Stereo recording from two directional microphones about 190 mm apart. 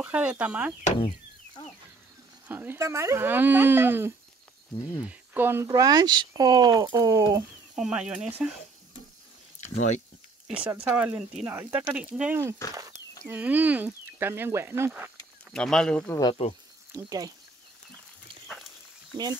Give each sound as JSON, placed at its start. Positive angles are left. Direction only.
{"t": 0.0, "sound": "speech", "side_deg": -5}
{"t": 2.4, "sound": "speech", "side_deg": -10}
{"t": 7.7, "sound": "speech", "side_deg": -5}
{"t": 9.6, "sound": "speech", "side_deg": 40}
{"t": 10.5, "sound": "speech", "side_deg": -10}
{"t": 15.5, "sound": "speech", "side_deg": 5}
{"t": 16.4, "sound": "speech", "side_deg": 30}
{"t": 16.9, "sound": "speech", "side_deg": -20}